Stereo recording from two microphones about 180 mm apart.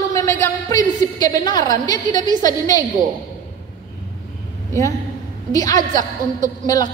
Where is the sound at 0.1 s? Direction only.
15° left (ahead or behind).